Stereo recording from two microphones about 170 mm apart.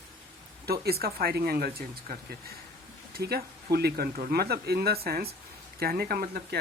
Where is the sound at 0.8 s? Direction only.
65° right (ahead or behind).